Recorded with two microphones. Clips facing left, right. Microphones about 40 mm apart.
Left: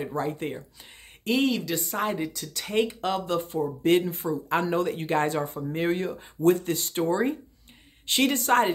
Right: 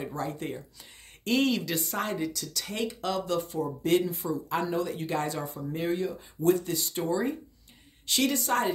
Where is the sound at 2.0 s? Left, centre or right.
Left.